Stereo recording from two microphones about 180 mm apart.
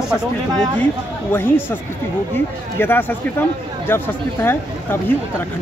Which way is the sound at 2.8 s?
10° left (ahead or behind).